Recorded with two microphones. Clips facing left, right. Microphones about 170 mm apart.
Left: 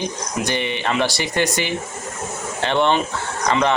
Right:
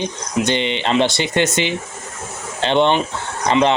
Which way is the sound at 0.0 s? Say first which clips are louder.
Right 4 dB; 20° right (ahead or behind).